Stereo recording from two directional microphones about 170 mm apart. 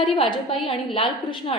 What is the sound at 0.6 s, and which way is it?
Speech, 30° left (ahead or behind).